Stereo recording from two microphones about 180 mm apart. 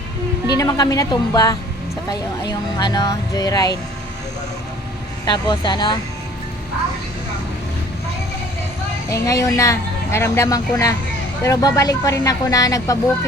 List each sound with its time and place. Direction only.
0.6 s speech: 20° left (ahead or behind)
5.2 s speech: 25° left (ahead or behind)
9.0 s speech: 15° left (ahead or behind)